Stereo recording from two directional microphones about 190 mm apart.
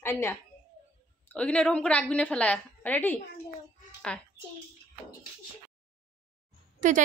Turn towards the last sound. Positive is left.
turn(degrees=-40)  # may be behind; listen again after turning